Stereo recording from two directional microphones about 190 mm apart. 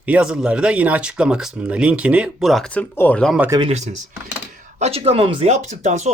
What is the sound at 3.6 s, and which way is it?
Speech, 35° right (ahead or behind).